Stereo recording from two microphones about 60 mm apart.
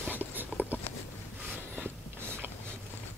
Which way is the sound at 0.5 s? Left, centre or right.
Left.